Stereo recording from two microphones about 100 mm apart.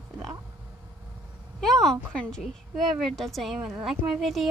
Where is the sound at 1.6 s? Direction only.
5° left (ahead or behind).